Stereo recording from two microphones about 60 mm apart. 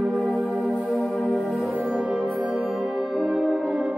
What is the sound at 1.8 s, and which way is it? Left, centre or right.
Music, centre.